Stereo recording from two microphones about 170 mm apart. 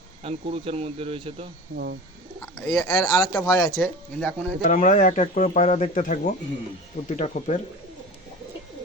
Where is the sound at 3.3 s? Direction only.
20° left (ahead or behind).